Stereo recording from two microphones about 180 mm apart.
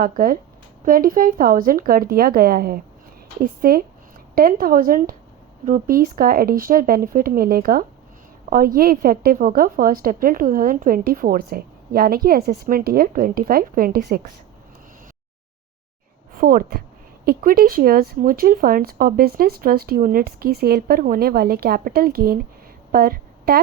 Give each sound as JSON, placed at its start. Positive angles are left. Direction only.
{"t": 0.0, "sound": "a woman's voice", "side_deg": -50}
{"t": 16.3, "sound": "a woman's voice", "side_deg": -50}
{"t": 22.9, "sound": "a sound", "side_deg": -55}